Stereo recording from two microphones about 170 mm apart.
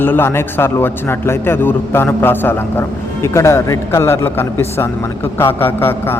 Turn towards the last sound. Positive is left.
turn(degrees=15)  # may be behind; listen again after turning